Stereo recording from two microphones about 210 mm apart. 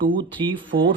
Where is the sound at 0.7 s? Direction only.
55° right (ahead or behind).